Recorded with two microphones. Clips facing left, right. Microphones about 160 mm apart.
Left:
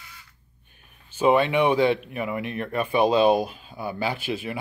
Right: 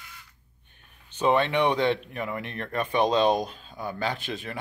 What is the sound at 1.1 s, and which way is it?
Speech, 5° left (ahead or behind).